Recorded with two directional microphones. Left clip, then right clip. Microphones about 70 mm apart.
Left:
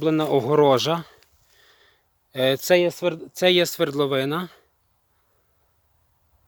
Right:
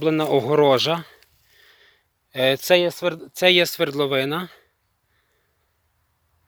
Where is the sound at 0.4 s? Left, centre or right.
Left.